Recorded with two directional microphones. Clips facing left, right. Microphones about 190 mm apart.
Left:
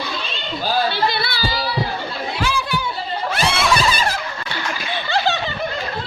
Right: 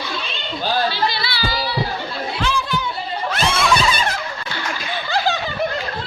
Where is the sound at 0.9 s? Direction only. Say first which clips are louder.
Left 1 dB; 55° left (ahead or behind).